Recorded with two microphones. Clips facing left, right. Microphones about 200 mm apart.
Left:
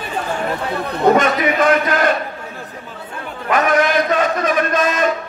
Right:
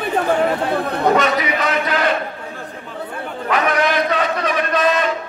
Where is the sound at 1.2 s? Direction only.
50° left (ahead or behind).